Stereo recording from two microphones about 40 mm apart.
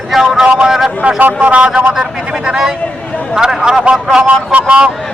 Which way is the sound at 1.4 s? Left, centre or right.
Right.